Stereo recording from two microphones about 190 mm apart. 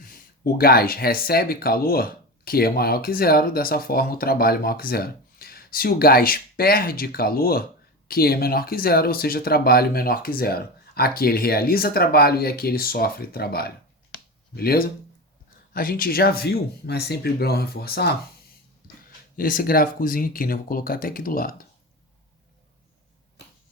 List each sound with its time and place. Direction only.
0.0 s speech: 50° left (ahead or behind)
19.4 s speech: 50° left (ahead or behind)